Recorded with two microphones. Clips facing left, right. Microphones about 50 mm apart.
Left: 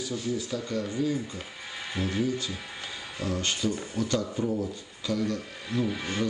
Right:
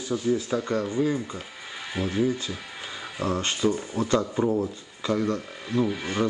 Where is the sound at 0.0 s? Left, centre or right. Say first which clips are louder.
Right 6 dB; right.